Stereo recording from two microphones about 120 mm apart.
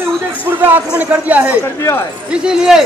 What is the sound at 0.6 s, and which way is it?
A man's voice, 15° right (ahead or behind).